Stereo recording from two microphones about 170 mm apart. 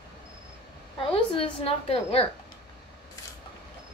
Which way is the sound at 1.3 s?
35° left (ahead or behind).